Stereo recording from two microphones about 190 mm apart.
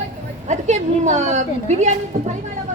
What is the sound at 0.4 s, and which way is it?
A woman's voice, 40° right (ahead or behind).